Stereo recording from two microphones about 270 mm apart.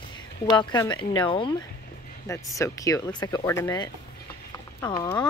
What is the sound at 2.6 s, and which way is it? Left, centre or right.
Speech, centre.